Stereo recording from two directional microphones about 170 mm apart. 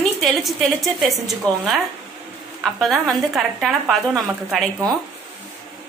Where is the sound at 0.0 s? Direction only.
Centre (ahead or behind).